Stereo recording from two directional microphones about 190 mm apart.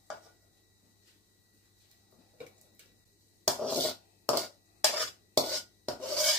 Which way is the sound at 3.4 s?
Centre (ahead or behind).